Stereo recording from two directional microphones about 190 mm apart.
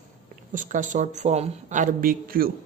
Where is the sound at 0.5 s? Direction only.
45° right (ahead or behind).